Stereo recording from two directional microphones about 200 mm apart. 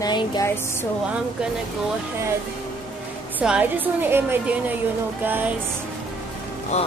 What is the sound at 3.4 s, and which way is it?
A woman's voice, 5° right (ahead or behind).